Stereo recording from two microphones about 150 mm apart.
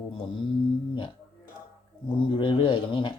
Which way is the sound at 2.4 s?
35° left (ahead or behind).